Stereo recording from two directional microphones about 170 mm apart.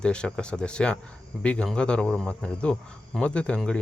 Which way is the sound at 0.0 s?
5° left (ahead or behind).